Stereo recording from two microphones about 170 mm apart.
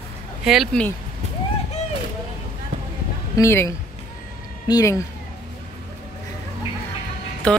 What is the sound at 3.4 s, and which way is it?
Speech, 15° left (ahead or behind).